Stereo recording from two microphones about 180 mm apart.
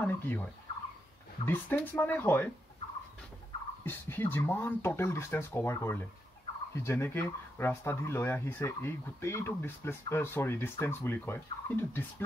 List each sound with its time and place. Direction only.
0.0 s speech: 10° left (ahead or behind)
3.8 s speech: 10° left (ahead or behind)